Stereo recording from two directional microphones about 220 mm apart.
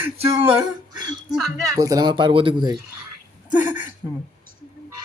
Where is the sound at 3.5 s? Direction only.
10° right (ahead or behind).